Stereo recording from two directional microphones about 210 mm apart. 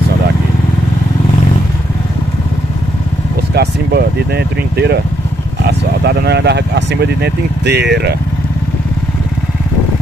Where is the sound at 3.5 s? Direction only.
50° right (ahead or behind).